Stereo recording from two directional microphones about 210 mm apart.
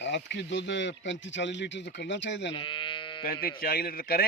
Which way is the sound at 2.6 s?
25° left (ahead or behind).